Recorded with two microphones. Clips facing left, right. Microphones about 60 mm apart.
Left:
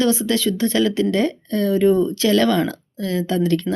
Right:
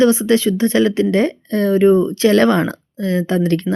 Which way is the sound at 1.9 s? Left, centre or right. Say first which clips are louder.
Right 4 dB; right.